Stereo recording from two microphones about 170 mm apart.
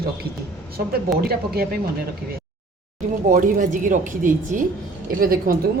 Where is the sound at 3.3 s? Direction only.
50° right (ahead or behind).